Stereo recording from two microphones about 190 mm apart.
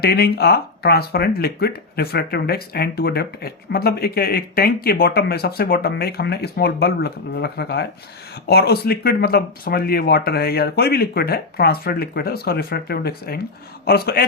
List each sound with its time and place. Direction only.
0.0 s speech: 55° left (ahead or behind)